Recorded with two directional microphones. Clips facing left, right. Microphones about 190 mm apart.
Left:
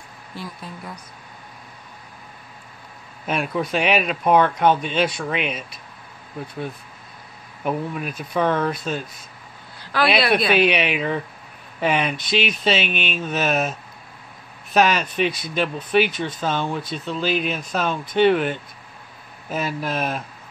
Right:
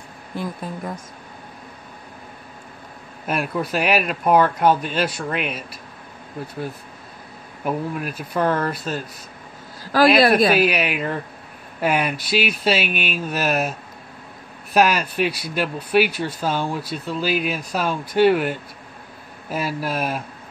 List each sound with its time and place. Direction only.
0.4 s speech: 50° right (ahead or behind)
3.3 s speech: 5° right (ahead or behind)
7.6 s speech: 5° right (ahead or behind)
9.9 s speech: 45° right (ahead or behind)
10.5 s speech: 5° right (ahead or behind)